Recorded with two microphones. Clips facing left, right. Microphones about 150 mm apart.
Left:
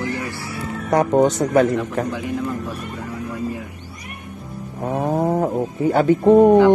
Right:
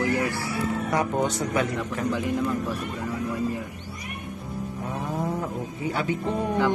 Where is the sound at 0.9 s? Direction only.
45° left (ahead or behind).